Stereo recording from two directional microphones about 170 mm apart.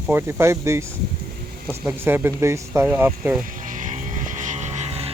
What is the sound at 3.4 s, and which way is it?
Vehicle, 50° right (ahead or behind).